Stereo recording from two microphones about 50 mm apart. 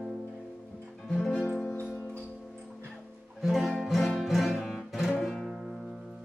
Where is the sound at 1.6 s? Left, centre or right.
Left.